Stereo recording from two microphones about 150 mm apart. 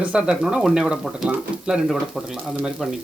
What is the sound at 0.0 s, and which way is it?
Speech, 5° right (ahead or behind).